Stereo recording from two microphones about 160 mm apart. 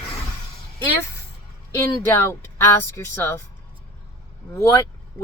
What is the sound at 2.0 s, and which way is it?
Speech, 15° left (ahead or behind).